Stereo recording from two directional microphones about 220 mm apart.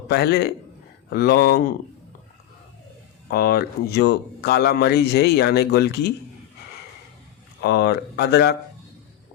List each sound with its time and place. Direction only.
0.1 s speech: 45° left (ahead or behind)
3.2 s speech: 45° left (ahead or behind)
7.6 s speech: 45° left (ahead or behind)